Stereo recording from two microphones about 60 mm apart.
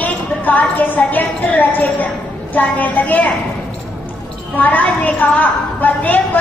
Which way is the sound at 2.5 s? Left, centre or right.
Left.